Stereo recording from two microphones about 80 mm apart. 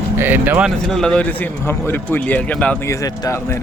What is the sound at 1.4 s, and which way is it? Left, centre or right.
A man's voice, left.